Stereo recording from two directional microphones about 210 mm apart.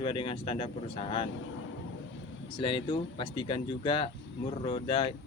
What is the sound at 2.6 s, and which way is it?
Speech, 25° left (ahead or behind).